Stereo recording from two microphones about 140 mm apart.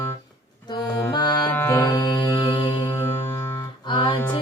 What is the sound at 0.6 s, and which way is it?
Accordion, 30° left (ahead or behind).